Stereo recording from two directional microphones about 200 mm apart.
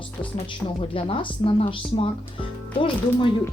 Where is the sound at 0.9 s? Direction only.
25° left (ahead or behind).